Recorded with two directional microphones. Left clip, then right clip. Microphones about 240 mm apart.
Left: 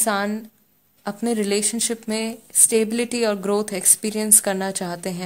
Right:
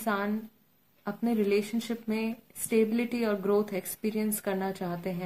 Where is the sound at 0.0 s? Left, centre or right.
Left.